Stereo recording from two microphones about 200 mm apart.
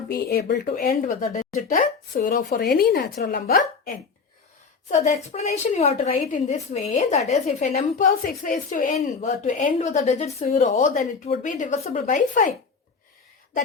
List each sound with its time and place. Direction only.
0.1 s a woman's voice: 55° left (ahead or behind)